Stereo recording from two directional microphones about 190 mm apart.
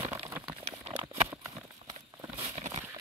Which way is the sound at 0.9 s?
25° right (ahead or behind).